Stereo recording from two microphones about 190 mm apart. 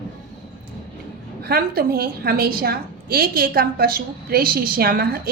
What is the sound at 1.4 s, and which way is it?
A woman's voice, 50° right (ahead or behind).